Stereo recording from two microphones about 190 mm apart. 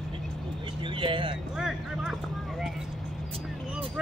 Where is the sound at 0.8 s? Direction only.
25° right (ahead or behind).